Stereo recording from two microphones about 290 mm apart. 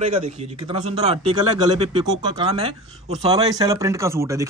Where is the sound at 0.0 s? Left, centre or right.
Centre.